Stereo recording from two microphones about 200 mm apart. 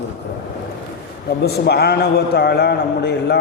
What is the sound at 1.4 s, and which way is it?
A man's voice, 55° left (ahead or behind).